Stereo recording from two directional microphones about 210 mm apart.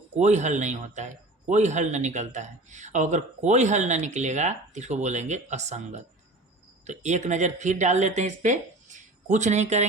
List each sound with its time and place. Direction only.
0.2 s a man's voice: 35° right (ahead or behind)